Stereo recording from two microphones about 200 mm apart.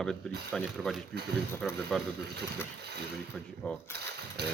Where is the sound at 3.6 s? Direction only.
5° left (ahead or behind).